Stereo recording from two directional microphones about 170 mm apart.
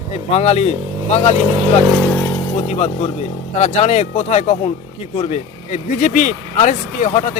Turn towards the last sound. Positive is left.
turn(degrees=50)  # may be behind; listen again after turning